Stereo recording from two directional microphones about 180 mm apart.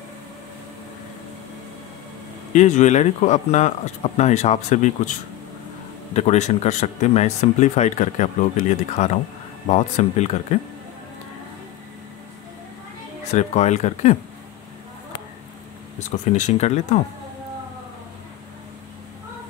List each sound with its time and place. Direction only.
2.5 s speech: 40° left (ahead or behind)
6.1 s speech: 40° left (ahead or behind)
13.3 s speech: 40° left (ahead or behind)
16.3 s speech: 40° left (ahead or behind)